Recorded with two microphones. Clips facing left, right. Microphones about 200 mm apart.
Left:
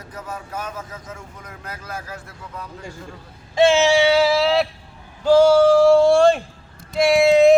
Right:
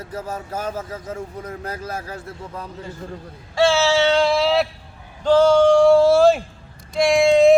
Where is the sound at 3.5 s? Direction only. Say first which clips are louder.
Left 2 dB; 20° left (ahead or behind); by 4.7 s centre (ahead or behind).